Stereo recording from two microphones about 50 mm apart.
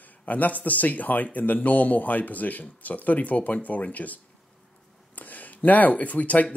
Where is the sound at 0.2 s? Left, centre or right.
Left.